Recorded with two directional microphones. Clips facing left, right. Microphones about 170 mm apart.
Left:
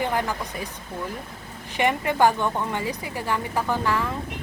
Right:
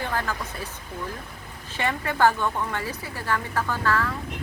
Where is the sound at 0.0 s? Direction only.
15° left (ahead or behind).